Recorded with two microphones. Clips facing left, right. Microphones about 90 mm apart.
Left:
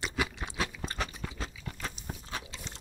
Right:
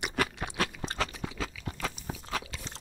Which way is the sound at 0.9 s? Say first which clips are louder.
Right 3 dB; 90° right.